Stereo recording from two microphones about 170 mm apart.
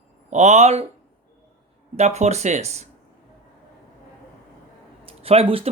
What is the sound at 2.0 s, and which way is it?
Speech, 40° right (ahead or behind).